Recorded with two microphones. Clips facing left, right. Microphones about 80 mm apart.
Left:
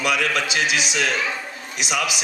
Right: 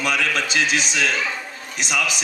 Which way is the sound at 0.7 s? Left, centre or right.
Right.